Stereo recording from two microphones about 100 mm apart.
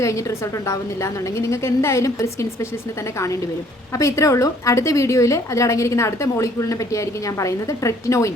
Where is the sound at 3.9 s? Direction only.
30° left (ahead or behind).